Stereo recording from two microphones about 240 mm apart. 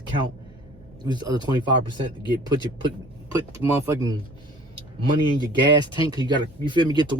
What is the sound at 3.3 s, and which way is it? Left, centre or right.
Speech, centre.